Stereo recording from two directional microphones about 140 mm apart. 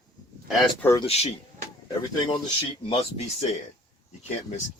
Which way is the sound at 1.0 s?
45° left (ahead or behind).